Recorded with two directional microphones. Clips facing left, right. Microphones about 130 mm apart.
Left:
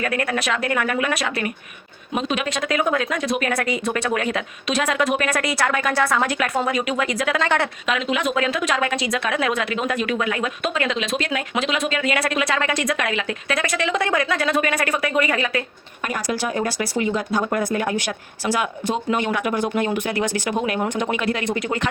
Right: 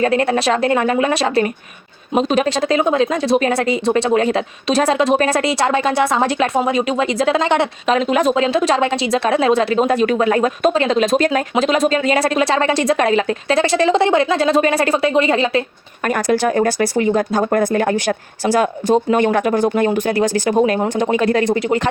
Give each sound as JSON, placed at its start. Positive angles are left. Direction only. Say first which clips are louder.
{"t": 0.0, "sound": "a woman's voice", "louder": "right 8 dB", "side_deg": -30}
{"t": 7.9, "sound": "a woman's voice", "louder": "right 10 dB", "side_deg": -40}
{"t": 8.4, "sound": "a woman's voice", "louder": "right 6 dB", "side_deg": -30}
{"t": 16.0, "sound": "a woman's voice", "louder": "right 8 dB", "side_deg": -55}